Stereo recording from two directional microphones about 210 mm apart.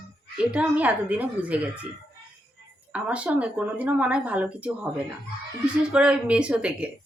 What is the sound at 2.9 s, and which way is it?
A woman's voice, 5° right (ahead or behind).